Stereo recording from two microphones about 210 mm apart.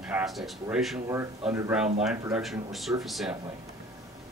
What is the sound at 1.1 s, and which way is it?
Speech, 10° right (ahead or behind).